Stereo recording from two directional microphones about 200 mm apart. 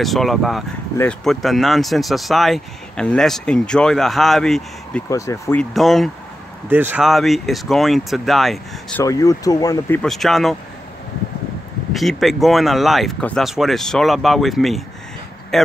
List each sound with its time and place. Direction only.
0.0 s speech: centre (ahead or behind)
5.1 s speech: 15° left (ahead or behind)
9.0 s speech: 15° left (ahead or behind); by 10.5 s centre (ahead or behind)
11.9 s speech: centre (ahead or behind)